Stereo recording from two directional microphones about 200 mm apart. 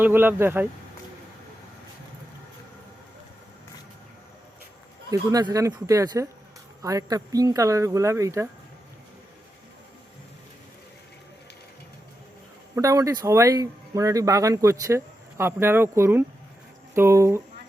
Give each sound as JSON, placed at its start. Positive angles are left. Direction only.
{"t": 0.0, "sound": "speech", "side_deg": -10}
{"t": 5.1, "sound": "speech", "side_deg": -20}
{"t": 12.7, "sound": "speech", "side_deg": -15}